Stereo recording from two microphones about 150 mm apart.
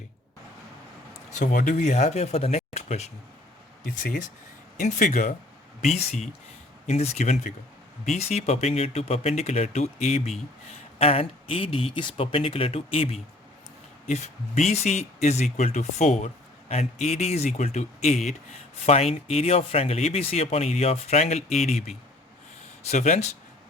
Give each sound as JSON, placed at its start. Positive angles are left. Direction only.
{"t": 1.4, "sound": "a man's voice", "side_deg": 60}
{"t": 3.8, "sound": "speech", "side_deg": 65}
{"t": 5.8, "sound": "a man's voice", "side_deg": 45}
{"t": 22.8, "sound": "a man's voice", "side_deg": 50}